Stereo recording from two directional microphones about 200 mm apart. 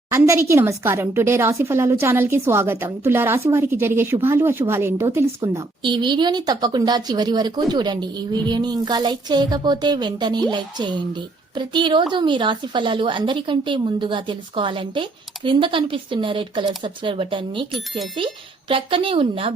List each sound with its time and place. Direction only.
0.1 s a woman's voice: 15° right (ahead or behind)
18.7 s a woman's voice: 25° right (ahead or behind)